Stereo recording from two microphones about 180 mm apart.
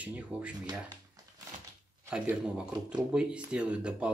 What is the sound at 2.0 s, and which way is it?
Speech, 10° right (ahead or behind).